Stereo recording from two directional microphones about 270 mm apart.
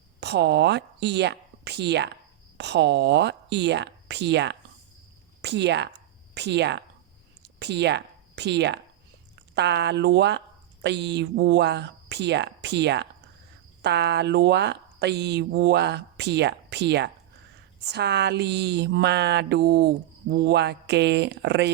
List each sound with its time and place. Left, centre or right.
0.2 s speech: right